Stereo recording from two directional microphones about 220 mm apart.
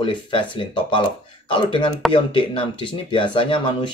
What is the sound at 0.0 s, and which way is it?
Speech, 20° left (ahead or behind).